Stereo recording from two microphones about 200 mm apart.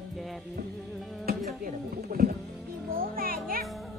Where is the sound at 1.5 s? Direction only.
50° right (ahead or behind).